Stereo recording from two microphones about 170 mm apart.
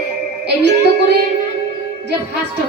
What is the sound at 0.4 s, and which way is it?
Music, 80° right.